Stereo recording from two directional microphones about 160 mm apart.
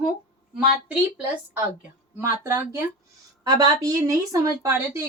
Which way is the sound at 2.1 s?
15° right (ahead or behind).